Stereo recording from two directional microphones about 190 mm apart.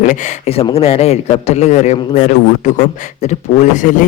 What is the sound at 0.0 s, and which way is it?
A man's voice, 40° left (ahead or behind).